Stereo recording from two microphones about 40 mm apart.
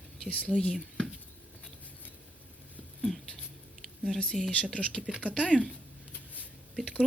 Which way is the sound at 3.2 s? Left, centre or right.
Centre.